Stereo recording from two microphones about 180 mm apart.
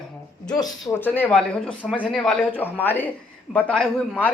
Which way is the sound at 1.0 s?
10° left (ahead or behind).